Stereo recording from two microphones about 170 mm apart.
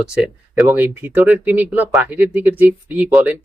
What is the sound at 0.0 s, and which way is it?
Speech, 5° right (ahead or behind).